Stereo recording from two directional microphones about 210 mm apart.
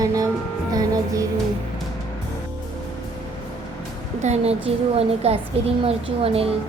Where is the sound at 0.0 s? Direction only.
15° right (ahead or behind).